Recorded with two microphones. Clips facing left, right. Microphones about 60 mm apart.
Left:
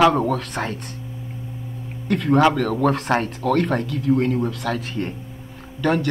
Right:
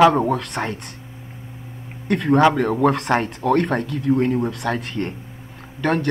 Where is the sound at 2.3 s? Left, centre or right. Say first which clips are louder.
Right 1 dB; right.